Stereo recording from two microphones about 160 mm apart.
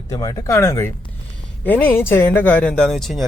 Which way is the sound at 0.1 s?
20° left (ahead or behind).